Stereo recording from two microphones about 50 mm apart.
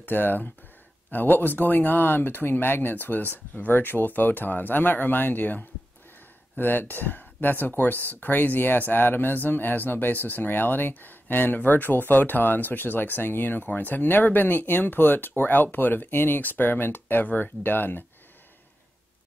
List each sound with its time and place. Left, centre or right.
0.0 s speech: left